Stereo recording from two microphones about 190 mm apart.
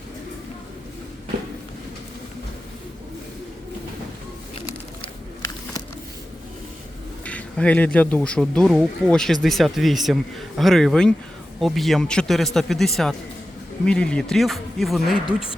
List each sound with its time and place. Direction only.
7.3 s speech: 5° left (ahead or behind)
15.3 s speech: 30° left (ahead or behind)